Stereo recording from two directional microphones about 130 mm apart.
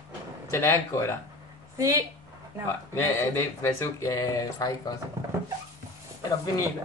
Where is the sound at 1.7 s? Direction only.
25° right (ahead or behind).